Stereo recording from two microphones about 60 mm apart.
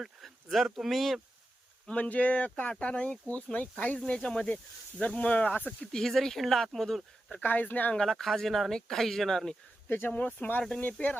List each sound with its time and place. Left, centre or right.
0.0 s speech: centre
1.9 s speech: left
5.6 s speech: centre
7.4 s speech: left
7.9 s speech: centre
9.9 s speech: left